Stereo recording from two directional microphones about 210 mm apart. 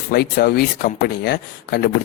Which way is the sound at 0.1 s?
45° left (ahead or behind).